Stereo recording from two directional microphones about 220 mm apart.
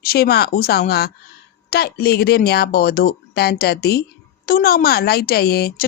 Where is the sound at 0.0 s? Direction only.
45° left (ahead or behind).